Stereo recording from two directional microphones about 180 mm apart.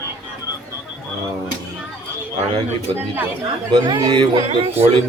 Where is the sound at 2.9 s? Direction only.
10° right (ahead or behind).